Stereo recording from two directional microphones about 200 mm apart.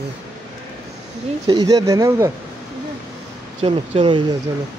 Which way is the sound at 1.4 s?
20° right (ahead or behind).